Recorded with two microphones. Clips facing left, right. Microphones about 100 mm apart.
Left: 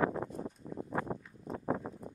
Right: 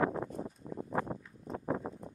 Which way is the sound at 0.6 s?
25° right (ahead or behind).